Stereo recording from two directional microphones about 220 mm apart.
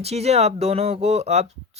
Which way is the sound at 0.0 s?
30° right (ahead or behind).